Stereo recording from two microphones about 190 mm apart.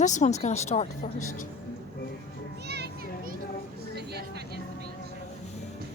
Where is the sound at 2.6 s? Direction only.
60° right (ahead or behind).